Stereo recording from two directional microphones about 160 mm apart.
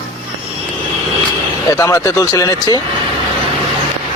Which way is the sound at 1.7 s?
20° left (ahead or behind).